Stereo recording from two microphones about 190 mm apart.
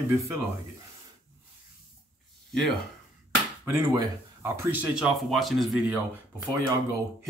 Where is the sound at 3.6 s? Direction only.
15° right (ahead or behind).